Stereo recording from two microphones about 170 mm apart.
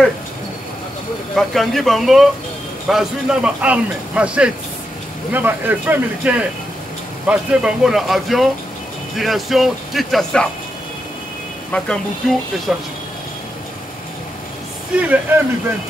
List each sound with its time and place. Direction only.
1.3 s speech: centre (ahead or behind)
11.7 s speech: 5° left (ahead or behind)
15.0 s speech: 10° right (ahead or behind)